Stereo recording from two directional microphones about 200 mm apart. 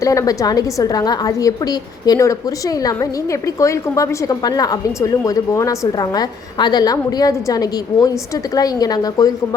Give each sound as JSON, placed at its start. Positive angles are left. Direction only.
{"t": 0.0, "sound": "a woman's voice", "side_deg": 15}
{"t": 3.6, "sound": "a woman's voice", "side_deg": 15}